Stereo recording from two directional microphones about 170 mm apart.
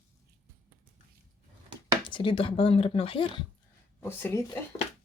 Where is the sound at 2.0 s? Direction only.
30° left (ahead or behind).